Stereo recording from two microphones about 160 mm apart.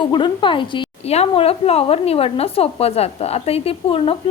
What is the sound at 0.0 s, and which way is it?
A woman's voice, 30° left (ahead or behind).